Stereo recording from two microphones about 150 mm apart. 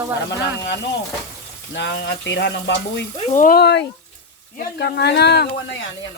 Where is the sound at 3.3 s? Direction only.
65° left (ahead or behind); by 5.4 s 90° left.